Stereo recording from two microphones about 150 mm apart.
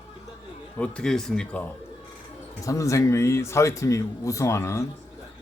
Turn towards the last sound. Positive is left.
turn(degrees=20)  # may be behind; listen again after turning